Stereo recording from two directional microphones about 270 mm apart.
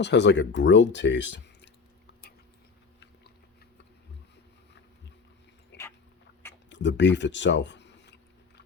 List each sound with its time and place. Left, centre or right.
0.0 s speech: left
5.7 s a sound: left
6.7 s speech: left